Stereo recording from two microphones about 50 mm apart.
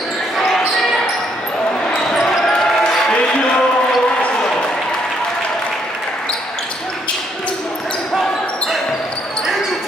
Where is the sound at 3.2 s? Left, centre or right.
Left.